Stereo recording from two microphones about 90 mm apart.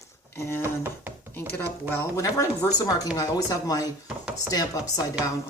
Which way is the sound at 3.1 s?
40° left (ahead or behind).